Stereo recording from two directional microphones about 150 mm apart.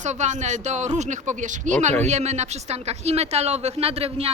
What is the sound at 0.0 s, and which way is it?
Speech, 50° right (ahead or behind).